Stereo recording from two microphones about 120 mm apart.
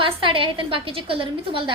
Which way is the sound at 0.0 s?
45° right (ahead or behind).